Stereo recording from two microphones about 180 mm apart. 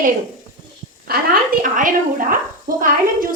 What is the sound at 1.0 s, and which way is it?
A woman's voice, 55° right (ahead or behind).